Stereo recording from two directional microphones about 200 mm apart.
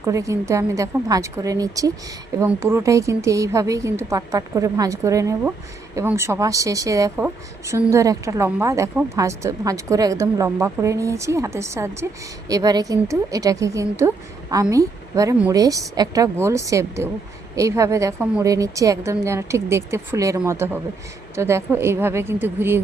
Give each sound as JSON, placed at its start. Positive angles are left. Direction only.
{"t": 0.0, "sound": "speech", "side_deg": -15}